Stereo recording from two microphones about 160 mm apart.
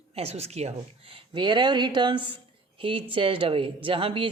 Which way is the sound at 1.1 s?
30° right (ahead or behind).